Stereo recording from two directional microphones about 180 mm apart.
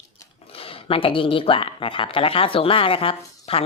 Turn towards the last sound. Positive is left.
turn(degrees=30)  # may be behind; listen again after turning